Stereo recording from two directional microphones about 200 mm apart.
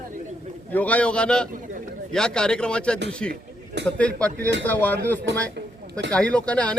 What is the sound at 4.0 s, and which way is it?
Speech, 5° left (ahead or behind).